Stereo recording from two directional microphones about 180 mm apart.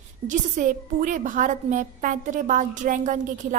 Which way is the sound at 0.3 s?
45° right (ahead or behind).